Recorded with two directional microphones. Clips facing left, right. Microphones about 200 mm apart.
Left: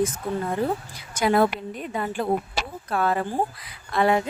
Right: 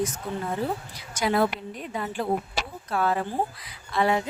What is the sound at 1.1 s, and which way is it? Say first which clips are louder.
A woman's voice: left 3 dB; 50° left (ahead or behind).